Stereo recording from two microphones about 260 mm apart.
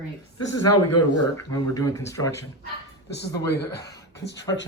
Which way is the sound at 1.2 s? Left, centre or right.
Centre.